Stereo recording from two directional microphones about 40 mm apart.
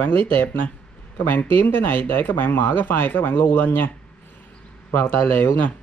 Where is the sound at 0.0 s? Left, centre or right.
Left.